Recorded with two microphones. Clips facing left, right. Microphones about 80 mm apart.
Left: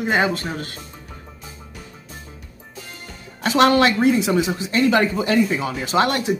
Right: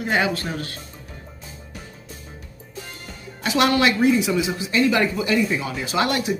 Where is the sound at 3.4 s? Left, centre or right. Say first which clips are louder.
Left 3 dB; left.